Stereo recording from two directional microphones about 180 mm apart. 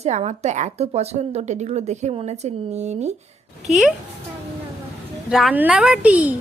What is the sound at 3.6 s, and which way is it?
Speech, centre (ahead or behind).